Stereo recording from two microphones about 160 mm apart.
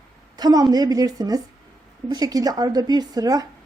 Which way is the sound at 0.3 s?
25° right (ahead or behind).